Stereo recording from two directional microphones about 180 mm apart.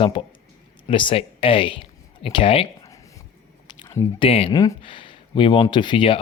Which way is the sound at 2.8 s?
15° left (ahead or behind).